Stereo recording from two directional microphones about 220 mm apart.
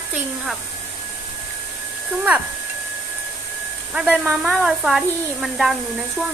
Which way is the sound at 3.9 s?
5° right (ahead or behind).